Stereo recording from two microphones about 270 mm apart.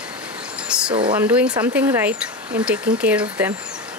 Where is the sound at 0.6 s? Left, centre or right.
Centre.